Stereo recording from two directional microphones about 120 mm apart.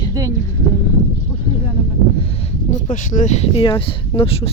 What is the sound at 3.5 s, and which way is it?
Speech, 45° left (ahead or behind).